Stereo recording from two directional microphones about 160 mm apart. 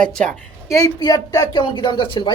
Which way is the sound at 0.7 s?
25° left (ahead or behind).